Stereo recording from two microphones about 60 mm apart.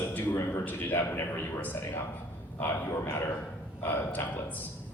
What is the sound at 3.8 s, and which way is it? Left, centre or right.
Speech, left.